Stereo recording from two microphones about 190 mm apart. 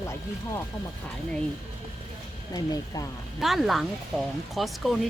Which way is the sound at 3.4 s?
Centre (ahead or behind).